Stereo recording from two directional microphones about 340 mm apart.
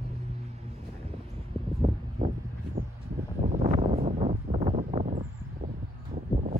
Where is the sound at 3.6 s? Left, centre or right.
Centre.